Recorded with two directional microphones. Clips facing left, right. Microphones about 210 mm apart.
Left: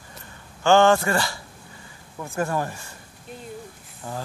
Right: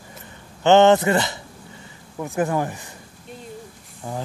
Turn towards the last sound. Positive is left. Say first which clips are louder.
# right 3 dB
turn(degrees=-15)  # may be behind; listen again after turning